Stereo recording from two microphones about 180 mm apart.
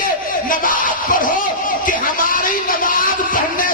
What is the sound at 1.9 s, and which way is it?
Music, 50° left (ahead or behind).